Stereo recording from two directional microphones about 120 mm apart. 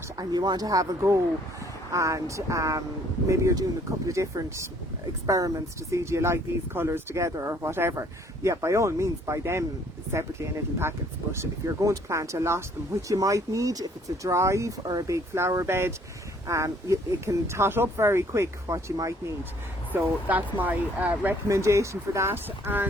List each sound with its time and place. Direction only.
0.2 s speech: 35° right (ahead or behind)
10.8 s speech: 20° right (ahead or behind)
19.9 s speech: 15° right (ahead or behind)
21.4 s speech: 25° right (ahead or behind)